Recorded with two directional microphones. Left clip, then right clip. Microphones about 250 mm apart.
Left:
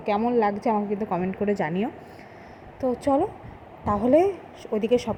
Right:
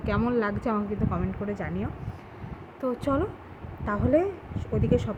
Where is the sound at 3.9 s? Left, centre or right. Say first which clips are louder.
Left 5 dB; centre.